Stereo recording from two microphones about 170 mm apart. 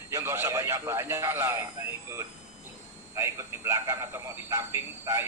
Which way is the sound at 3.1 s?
15° right (ahead or behind).